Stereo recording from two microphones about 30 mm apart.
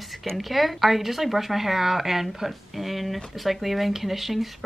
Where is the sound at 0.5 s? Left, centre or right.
Centre.